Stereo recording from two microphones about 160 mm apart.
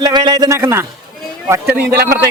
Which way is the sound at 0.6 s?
15° right (ahead or behind).